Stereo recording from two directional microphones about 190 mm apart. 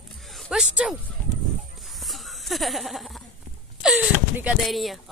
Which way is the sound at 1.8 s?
Centre (ahead or behind).